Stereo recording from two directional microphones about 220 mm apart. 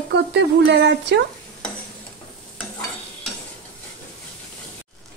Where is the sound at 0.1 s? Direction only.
50° right (ahead or behind).